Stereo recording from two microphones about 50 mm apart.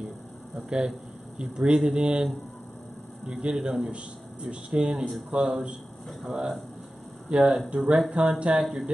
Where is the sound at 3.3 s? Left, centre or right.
Right.